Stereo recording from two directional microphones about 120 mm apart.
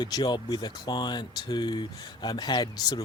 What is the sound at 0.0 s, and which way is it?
Speech, 35° left (ahead or behind).